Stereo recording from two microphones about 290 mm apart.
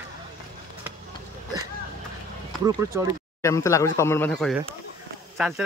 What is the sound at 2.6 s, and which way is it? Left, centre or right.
Speech, centre.